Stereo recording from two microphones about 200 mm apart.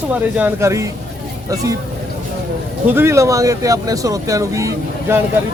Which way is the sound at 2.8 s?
10° right (ahead or behind).